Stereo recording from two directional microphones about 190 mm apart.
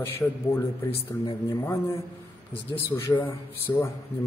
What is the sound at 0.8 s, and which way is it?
Speech, 30° left (ahead or behind).